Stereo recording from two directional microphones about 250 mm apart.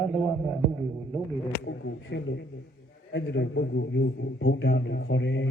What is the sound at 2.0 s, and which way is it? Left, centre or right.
A man's voice, left.